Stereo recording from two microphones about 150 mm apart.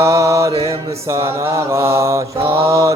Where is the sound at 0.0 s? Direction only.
20° right (ahead or behind).